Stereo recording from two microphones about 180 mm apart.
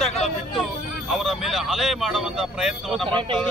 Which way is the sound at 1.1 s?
Centre (ahead or behind).